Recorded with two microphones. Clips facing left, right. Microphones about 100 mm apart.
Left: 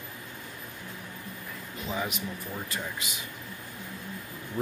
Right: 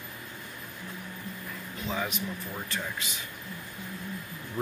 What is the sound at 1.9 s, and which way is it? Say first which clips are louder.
Speech: even; 5° left (ahead or behind).